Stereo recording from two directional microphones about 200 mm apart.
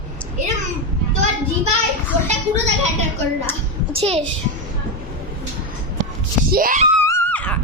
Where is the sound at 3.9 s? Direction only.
30° right (ahead or behind).